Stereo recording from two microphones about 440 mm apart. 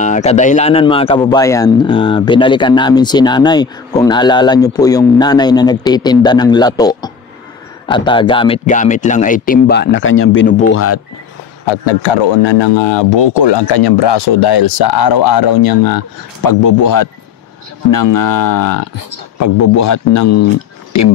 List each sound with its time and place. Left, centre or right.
0.0 s speech: centre
11.6 s a man's voice: left